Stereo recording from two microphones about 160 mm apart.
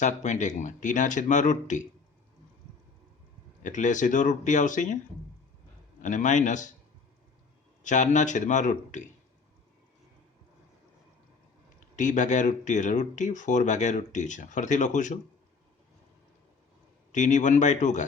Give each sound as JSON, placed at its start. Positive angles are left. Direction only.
{"t": 0.0, "sound": "speech", "side_deg": 50}
{"t": 3.6, "sound": "speech", "side_deg": 50}
{"t": 6.0, "sound": "speech", "side_deg": 50}
{"t": 7.9, "sound": "speech", "side_deg": 50}
{"t": 11.9, "sound": "speech", "side_deg": 50}
{"t": 17.1, "sound": "speech", "side_deg": 50}